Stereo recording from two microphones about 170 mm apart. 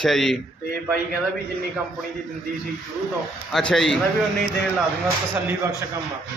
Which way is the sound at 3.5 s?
5° left (ahead or behind).